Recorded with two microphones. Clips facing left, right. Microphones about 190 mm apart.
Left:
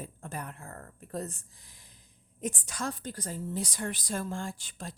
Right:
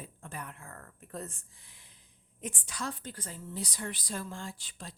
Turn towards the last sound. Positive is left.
turn(degrees=45)  # may be behind; listen again after turning